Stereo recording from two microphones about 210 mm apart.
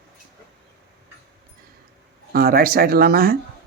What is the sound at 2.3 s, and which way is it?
Speech, 45° right (ahead or behind).